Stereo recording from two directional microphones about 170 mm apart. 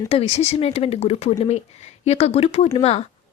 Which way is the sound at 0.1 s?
35° left (ahead or behind).